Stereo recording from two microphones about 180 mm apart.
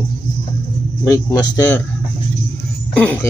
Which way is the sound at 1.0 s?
20° left (ahead or behind).